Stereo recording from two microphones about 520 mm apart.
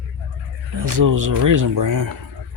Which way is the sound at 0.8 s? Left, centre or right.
Right.